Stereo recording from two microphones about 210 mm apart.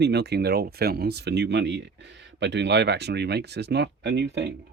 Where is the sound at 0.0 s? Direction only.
50° right (ahead or behind).